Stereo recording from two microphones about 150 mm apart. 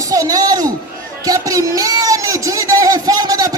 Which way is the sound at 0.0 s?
25° right (ahead or behind).